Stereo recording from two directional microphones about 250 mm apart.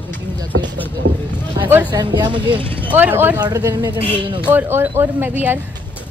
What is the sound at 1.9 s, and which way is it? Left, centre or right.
Speech, centre.